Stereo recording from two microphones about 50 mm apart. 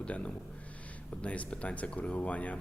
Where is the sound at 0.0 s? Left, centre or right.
Left.